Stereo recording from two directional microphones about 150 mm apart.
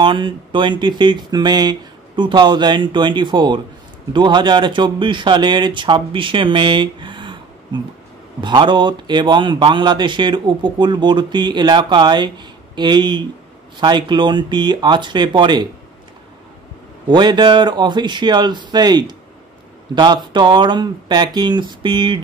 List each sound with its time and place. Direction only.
0.0 s a man's voice: 35° right (ahead or behind)
17.1 s speech: 30° right (ahead or behind)